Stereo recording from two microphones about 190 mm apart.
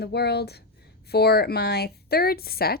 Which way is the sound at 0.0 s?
60° left (ahead or behind).